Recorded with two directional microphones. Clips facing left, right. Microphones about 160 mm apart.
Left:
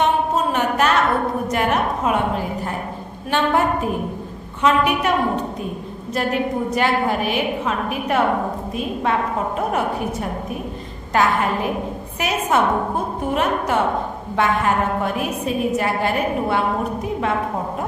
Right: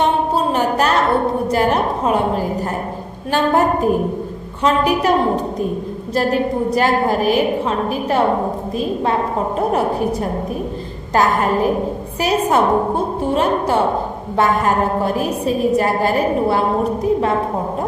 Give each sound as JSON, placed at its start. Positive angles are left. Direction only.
{"t": 0.0, "sound": "a sound", "side_deg": -30}
{"t": 3.3, "sound": "a woman's voice", "side_deg": -40}
{"t": 11.1, "sound": "a woman's voice", "side_deg": -40}